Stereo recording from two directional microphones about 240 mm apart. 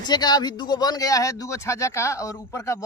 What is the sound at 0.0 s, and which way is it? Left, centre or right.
Speech, centre.